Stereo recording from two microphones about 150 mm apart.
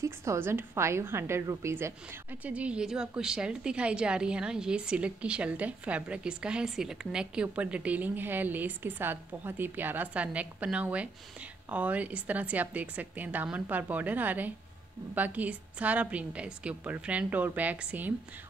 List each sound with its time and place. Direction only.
0.0 s a woman's voice: 20° right (ahead or behind)